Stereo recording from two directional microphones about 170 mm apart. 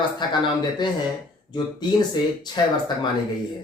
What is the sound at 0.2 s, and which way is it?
Speech, 25° left (ahead or behind).